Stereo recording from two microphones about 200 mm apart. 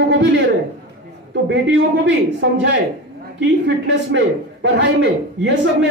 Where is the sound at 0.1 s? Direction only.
60° right (ahead or behind).